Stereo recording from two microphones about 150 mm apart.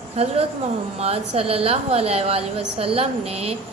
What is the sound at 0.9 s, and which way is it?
A woman's voice, 45° right (ahead or behind).